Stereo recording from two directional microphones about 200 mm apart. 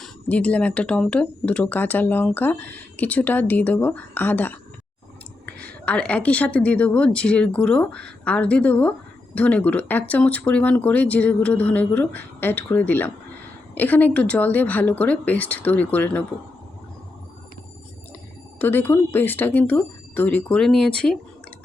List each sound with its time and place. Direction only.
0.0 s speech: 5° left (ahead or behind)
5.5 s speech: 5° left (ahead or behind)
18.6 s speech: 10° left (ahead or behind)